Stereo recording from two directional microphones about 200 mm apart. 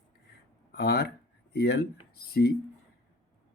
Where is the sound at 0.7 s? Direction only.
50° left (ahead or behind).